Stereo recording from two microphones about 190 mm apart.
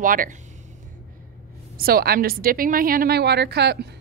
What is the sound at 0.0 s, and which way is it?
Speech, 45° right (ahead or behind).